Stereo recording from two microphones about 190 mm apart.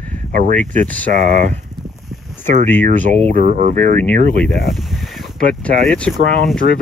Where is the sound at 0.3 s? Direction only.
45° right (ahead or behind).